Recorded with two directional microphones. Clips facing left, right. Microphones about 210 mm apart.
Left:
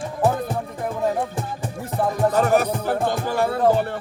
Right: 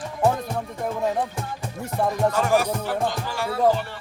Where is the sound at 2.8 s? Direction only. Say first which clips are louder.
Left 3 dB; 50° left (ahead or behind).